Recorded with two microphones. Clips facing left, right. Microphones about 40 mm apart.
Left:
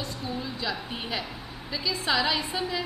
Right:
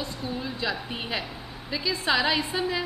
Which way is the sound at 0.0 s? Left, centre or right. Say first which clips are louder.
Right 1 dB; centre.